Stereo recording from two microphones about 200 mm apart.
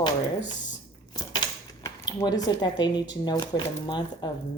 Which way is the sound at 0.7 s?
20° left (ahead or behind).